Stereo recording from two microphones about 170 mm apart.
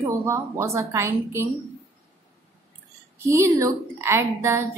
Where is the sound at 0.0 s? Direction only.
15° right (ahead or behind).